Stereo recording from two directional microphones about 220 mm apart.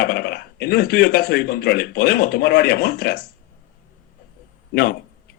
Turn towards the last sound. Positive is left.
turn(degrees=45)  # may be behind; listen again after turning